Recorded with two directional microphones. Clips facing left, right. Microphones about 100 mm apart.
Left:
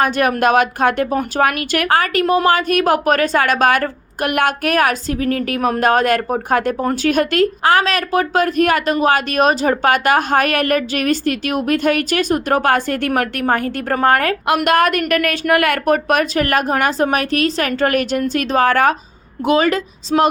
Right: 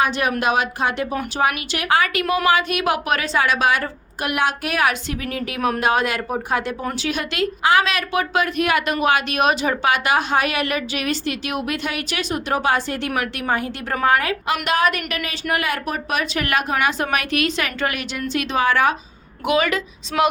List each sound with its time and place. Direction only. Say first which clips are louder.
0.0 s a woman's voice: left 5 dB; 50° left (ahead or behind)
2.2 s speech: left 5 dB; 30° left (ahead or behind)
2.5 s a woman's voice: left 4 dB; 45° left (ahead or behind)
19.5 s speech: left 4 dB; 35° left (ahead or behind)